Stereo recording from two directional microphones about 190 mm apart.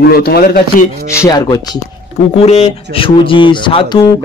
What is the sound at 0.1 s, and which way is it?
Speech, 55° left (ahead or behind).